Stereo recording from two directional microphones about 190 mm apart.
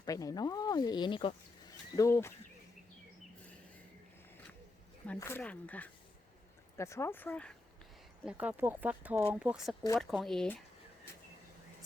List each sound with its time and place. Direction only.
0.0 s speech: 20° left (ahead or behind)
5.0 s speech: 10° left (ahead or behind)
8.2 s speech: 5° right (ahead or behind)